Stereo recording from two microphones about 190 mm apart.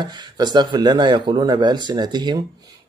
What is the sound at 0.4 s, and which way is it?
Speech, 25° right (ahead or behind).